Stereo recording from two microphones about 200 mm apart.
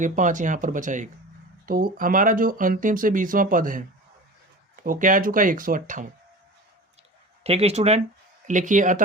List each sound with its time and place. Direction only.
0.0 s speech: 40° right (ahead or behind)
7.4 s speech: 30° right (ahead or behind)